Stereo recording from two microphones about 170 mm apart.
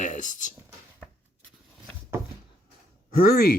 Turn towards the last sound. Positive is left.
turn(degrees=60)  # may be behind; listen again after turning